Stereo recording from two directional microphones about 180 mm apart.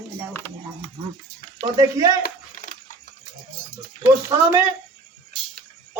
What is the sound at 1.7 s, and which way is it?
Speech, 20° right (ahead or behind).